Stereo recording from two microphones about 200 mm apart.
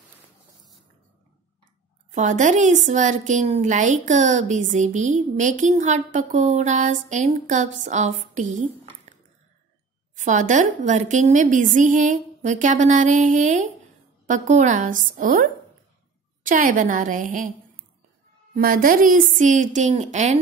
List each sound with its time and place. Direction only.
2.1 s a woman's voice: 40° right (ahead or behind)
10.1 s a woman's voice: 40° right (ahead or behind)
16.4 s a woman's voice: 40° right (ahead or behind)
18.5 s a woman's voice: 45° right (ahead or behind)